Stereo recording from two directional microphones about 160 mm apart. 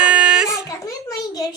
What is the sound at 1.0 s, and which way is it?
Speech, 20° left (ahead or behind).